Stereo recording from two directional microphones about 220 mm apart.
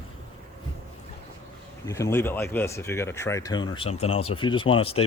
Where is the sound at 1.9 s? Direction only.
10° left (ahead or behind).